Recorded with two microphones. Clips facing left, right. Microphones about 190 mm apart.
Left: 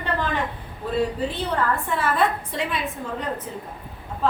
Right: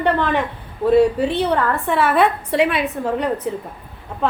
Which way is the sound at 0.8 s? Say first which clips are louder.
Right 10 dB; 65° right (ahead or behind).